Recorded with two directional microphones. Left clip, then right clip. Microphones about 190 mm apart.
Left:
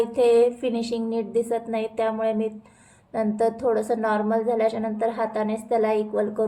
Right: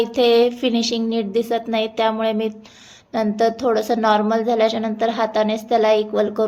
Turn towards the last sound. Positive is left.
turn(degrees=-15)  # may be behind; listen again after turning